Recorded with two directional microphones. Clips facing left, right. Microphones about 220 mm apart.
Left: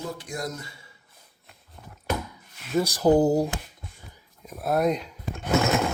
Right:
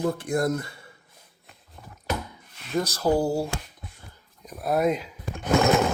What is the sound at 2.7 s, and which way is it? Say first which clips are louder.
Speech: left 3 dB; 10° left (ahead or behind).